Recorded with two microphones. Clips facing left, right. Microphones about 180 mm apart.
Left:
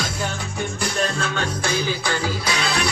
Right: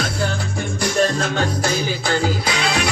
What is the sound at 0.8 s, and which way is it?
Music, 40° right (ahead or behind).